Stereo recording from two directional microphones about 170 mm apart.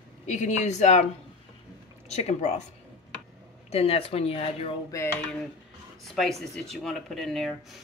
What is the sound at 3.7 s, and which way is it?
Speech, 35° left (ahead or behind).